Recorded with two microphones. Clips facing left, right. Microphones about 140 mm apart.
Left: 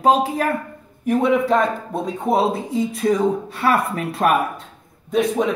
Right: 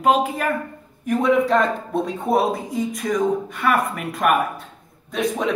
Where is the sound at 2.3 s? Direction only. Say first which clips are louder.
Left 2 dB; 25° left (ahead or behind).